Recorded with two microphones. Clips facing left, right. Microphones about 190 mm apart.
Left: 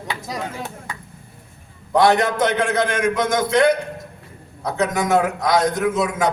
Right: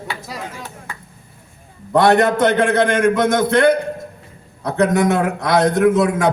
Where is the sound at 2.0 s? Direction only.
60° right (ahead or behind).